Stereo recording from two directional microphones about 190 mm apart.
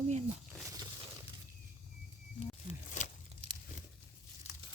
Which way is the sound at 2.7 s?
40° left (ahead or behind).